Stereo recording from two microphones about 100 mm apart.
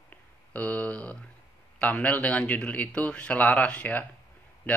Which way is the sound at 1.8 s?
15° left (ahead or behind).